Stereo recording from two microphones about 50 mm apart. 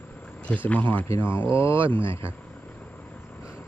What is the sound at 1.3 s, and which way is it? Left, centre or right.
Speech, left.